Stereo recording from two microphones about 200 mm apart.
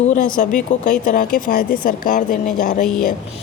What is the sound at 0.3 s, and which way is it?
Speech, 40° left (ahead or behind).